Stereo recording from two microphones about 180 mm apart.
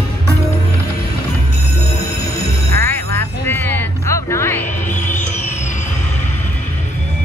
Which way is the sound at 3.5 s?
10° left (ahead or behind).